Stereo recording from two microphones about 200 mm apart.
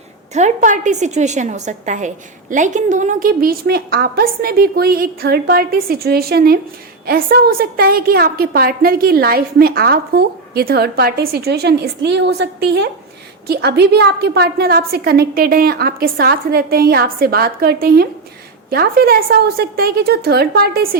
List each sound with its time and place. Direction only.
0.3 s a woman's voice: 40° right (ahead or behind)